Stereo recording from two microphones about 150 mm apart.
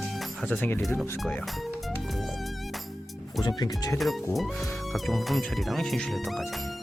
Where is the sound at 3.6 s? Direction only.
25° left (ahead or behind).